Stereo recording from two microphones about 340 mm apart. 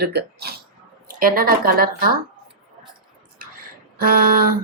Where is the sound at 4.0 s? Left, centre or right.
Right.